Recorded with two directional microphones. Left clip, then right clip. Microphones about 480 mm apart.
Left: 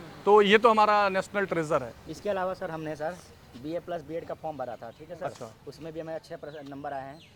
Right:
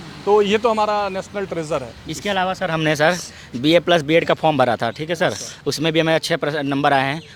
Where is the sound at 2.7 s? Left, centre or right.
Right.